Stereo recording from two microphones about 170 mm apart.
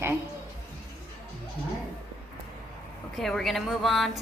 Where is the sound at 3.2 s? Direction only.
Centre (ahead or behind).